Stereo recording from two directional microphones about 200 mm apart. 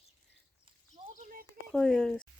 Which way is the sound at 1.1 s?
40° right (ahead or behind).